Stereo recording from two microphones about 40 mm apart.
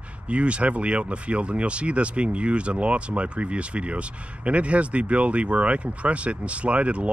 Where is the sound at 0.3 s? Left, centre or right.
Right.